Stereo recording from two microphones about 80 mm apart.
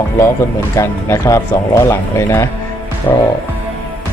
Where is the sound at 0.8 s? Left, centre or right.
Left.